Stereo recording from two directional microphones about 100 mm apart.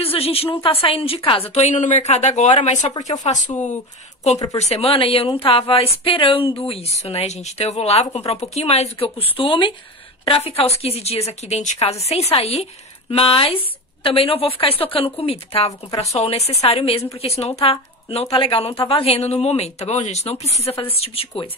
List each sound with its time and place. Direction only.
0.0 s a woman's voice: 75° left (ahead or behind)
10.2 s speech: 80° left
13.1 s a woman's voice: 70° left (ahead or behind)
16.2 s a woman's voice: 90° left; by 21.5 s 70° left (ahead or behind)